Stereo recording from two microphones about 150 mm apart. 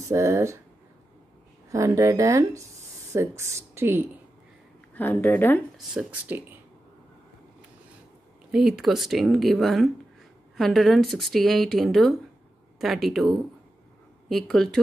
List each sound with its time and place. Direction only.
0.1 s speech: 20° right (ahead or behind)
1.7 s speech: 20° right (ahead or behind)
4.9 s a woman's voice: 10° left (ahead or behind)
5.9 s speech: 10° right (ahead or behind)
8.5 s speech: 5° right (ahead or behind)